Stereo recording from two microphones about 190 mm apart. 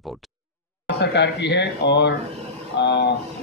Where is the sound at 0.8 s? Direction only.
60° left (ahead or behind).